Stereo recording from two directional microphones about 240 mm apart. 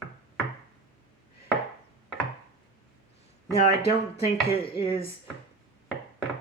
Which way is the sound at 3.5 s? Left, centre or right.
Left.